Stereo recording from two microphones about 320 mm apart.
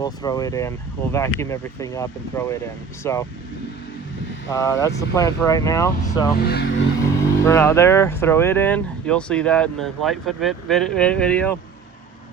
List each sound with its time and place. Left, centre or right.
0.0 s speech: centre
4.4 s speech: centre
6.0 s speech: left
7.0 s speech: centre